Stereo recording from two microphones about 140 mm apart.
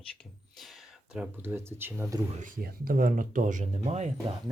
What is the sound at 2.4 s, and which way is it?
Speech, 85° right.